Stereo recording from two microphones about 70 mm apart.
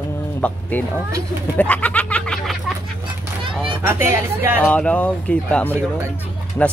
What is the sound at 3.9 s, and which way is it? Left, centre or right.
Speech, right.